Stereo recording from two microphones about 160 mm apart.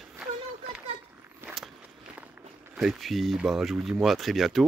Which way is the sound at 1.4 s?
5° right (ahead or behind).